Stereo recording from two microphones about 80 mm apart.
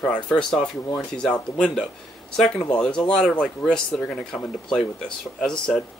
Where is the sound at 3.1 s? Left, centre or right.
Centre.